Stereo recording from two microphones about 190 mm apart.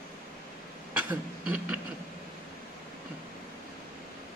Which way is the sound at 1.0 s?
5° right (ahead or behind).